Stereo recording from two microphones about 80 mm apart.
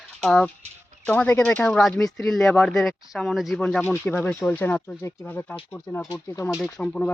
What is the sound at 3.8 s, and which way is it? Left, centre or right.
Speech, left.